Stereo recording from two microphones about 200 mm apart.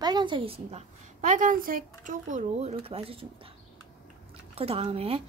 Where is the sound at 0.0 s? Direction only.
20° right (ahead or behind).